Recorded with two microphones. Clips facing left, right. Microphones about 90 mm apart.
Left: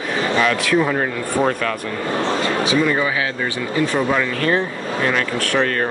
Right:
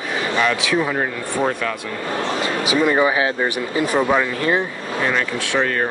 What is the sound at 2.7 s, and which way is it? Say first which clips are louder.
Speech: right 5 dB; 20° right (ahead or behind).